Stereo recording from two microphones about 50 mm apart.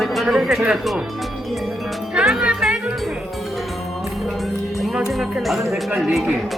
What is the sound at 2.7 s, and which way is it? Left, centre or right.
Music, right.